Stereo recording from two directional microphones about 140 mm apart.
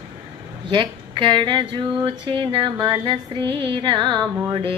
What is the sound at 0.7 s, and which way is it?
Speech, 35° right (ahead or behind).